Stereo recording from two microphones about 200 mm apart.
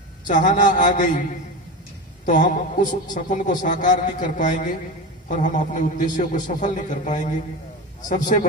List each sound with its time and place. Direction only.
0.3 s a man's voice: 40° left (ahead or behind)
2.2 s a man's voice: 40° left (ahead or behind)